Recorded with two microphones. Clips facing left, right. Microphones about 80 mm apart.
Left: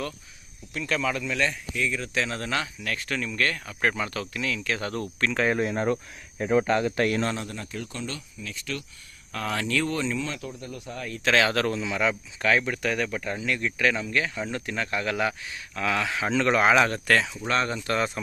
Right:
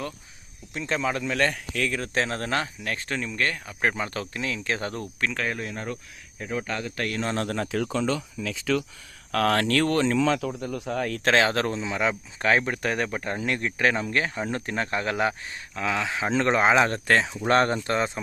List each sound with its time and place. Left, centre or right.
0.7 s speech: right
1.5 s speech: right
2.0 s speech: right
5.5 s speech: left
6.9 s a man's voice: left
7.3 s speech: right
9.3 s speech: right
11.3 s speech: right
15.7 s speech: centre
17.4 s speech: right
17.8 s speech: right